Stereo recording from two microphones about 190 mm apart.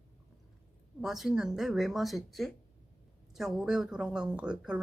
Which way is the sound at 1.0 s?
Centre (ahead or behind).